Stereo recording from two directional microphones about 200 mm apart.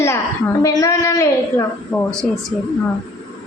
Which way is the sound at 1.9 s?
5° left (ahead or behind).